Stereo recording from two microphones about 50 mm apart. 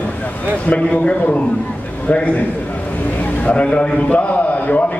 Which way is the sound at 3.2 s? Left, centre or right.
Left.